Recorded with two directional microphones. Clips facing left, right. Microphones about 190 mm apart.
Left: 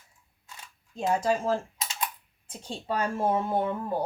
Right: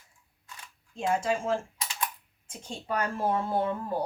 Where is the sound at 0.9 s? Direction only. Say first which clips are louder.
Left 2 dB; 40° left (ahead or behind); by 3.8 s 20° left (ahead or behind).